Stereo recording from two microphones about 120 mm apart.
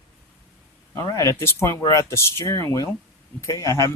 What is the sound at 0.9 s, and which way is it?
Speech, 25° left (ahead or behind).